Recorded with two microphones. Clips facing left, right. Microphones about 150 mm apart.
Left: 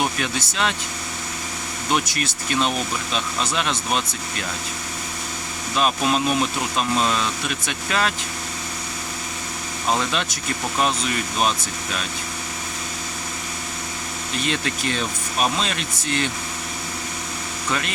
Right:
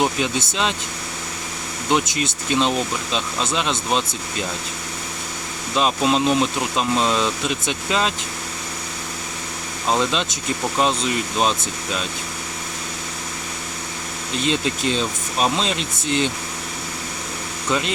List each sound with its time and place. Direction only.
0.0 s speech: 20° right (ahead or behind)
1.9 s speech: 20° right (ahead or behind)
5.7 s speech: 20° right (ahead or behind)
9.9 s speech: 20° right (ahead or behind)
14.4 s speech: 20° right (ahead or behind)
17.7 s speech: 20° right (ahead or behind)